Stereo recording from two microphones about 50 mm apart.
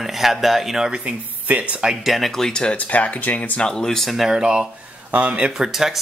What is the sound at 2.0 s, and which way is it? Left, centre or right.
Speech, centre.